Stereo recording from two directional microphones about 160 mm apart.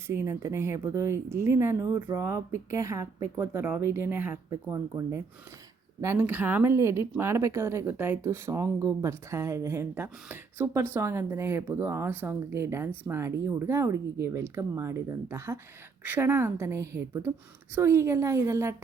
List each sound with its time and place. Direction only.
0.1 s speech: 15° right (ahead or behind)